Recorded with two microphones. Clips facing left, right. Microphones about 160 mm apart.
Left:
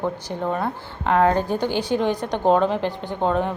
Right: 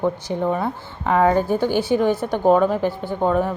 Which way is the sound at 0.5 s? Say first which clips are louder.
Right 1 dB; 5° right (ahead or behind).